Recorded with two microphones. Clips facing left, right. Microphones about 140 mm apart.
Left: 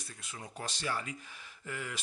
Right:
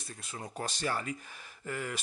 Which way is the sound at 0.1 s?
40° right (ahead or behind).